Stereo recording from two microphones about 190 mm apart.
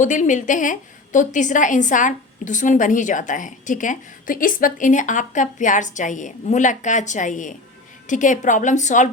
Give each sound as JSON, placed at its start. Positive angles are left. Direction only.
{"t": 0.0, "sound": "a woman's voice", "side_deg": 40}